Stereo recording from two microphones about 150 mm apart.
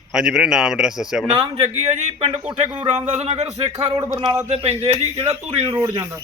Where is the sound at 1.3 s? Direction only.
45° right (ahead or behind).